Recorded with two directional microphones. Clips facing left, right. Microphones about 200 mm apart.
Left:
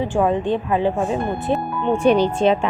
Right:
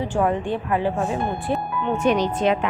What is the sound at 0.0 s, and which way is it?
Speech, 15° left (ahead or behind).